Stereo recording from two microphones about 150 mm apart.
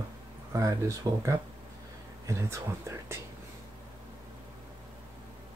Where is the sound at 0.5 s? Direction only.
20° right (ahead or behind).